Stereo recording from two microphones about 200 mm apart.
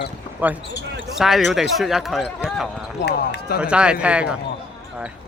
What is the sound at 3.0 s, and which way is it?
Speech, 60° left (ahead or behind).